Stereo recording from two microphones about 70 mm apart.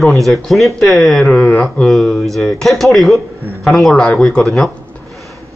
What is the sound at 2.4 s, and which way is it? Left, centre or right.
A man's voice, centre.